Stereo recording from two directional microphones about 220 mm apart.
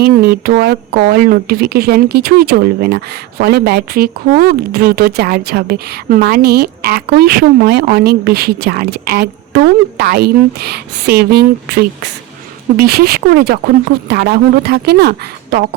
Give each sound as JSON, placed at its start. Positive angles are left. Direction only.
{"t": 0.0, "sound": "speech", "side_deg": -45}